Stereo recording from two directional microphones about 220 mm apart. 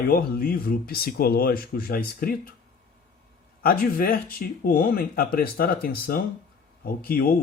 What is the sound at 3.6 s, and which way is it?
Speech, 40° left (ahead or behind).